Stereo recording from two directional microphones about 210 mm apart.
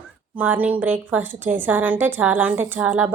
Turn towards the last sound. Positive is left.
turn(degrees=-10)  # may be behind; listen again after turning